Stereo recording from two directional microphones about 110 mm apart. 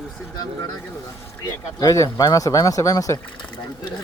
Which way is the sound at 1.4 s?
35° left (ahead or behind).